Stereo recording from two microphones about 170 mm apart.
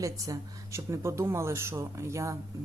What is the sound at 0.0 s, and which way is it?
A woman's voice, 20° right (ahead or behind).